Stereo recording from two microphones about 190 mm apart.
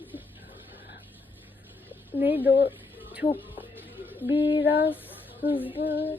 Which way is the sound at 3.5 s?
10° right (ahead or behind).